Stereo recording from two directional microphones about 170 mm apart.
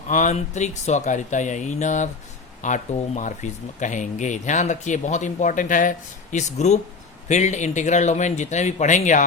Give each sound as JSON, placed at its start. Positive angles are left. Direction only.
{"t": 0.1, "sound": "speech", "side_deg": 45}